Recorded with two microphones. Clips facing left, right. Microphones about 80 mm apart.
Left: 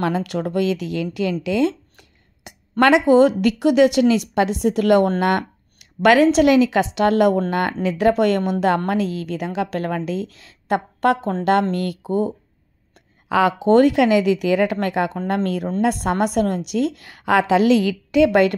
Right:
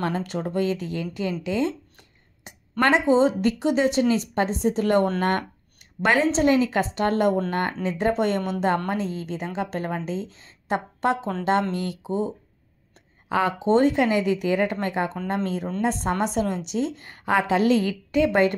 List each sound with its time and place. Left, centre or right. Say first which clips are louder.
0.0 s a woman's voice: left 5 dB; left
1.4 s a sound: left 5 dB; left
2.8 s a woman's voice: left 5 dB; left
13.3 s a woman's voice: left 5 dB; left